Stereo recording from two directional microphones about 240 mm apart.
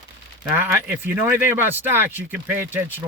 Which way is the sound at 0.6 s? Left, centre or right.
Centre.